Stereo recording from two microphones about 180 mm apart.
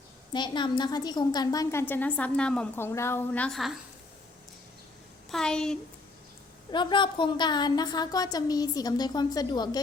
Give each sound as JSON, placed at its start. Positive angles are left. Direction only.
{"t": 0.3, "sound": "a woman's voice", "side_deg": 25}
{"t": 5.3, "sound": "a child's voice", "side_deg": 5}
{"t": 6.7, "sound": "a woman's voice", "side_deg": 25}